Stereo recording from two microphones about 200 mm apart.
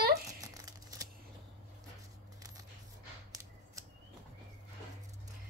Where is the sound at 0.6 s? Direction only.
15° right (ahead or behind).